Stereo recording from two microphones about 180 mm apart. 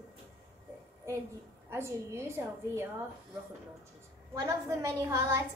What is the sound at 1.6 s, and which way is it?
A woman's voice, 15° right (ahead or behind).